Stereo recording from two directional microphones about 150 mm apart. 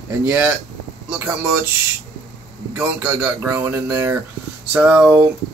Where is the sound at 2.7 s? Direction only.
15° right (ahead or behind).